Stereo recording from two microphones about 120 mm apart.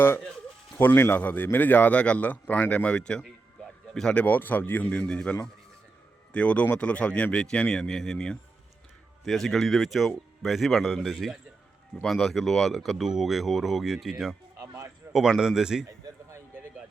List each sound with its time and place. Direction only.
0.8 s speech: 15° left (ahead or behind); by 14.3 s centre (ahead or behind)
14.6 s a sound: 25° right (ahead or behind)
15.1 s speech: 5° right (ahead or behind)